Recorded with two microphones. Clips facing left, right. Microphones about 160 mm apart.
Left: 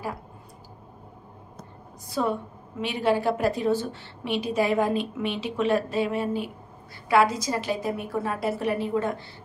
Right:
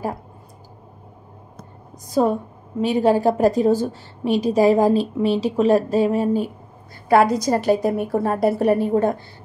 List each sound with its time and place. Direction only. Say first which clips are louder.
2.0 s a woman's voice: right 8 dB; 45° right (ahead or behind)